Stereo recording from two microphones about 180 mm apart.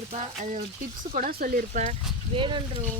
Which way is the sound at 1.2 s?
55° right (ahead or behind).